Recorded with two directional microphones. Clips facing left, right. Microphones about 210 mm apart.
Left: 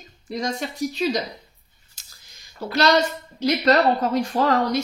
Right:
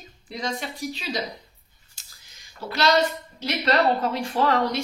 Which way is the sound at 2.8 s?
45° left (ahead or behind).